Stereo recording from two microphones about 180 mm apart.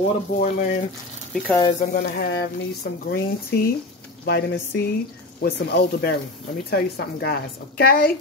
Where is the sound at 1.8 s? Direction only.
60° left (ahead or behind).